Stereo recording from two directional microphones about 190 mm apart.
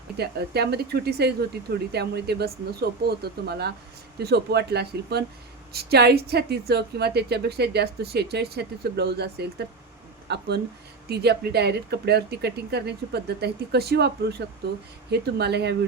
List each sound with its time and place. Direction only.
0.2 s a woman's voice: 60° right (ahead or behind)